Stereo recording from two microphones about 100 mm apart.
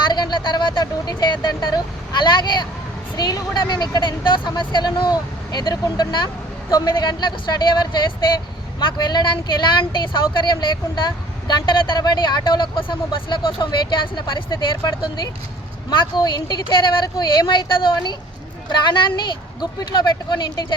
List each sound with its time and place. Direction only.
0.1 s speech: 45° left (ahead or behind)